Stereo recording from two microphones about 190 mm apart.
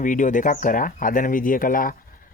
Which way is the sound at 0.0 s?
45° left (ahead or behind).